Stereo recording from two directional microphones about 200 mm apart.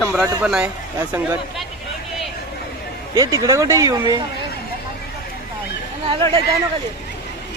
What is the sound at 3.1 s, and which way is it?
Speech, 15° right (ahead or behind).